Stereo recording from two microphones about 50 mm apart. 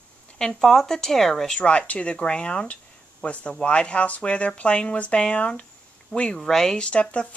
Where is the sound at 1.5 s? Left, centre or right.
Left.